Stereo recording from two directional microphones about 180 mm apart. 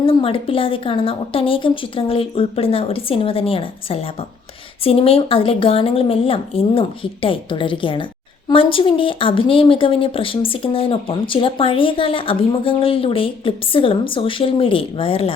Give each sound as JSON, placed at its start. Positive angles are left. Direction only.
{"t": 0.0, "sound": "a woman's voice", "side_deg": 30}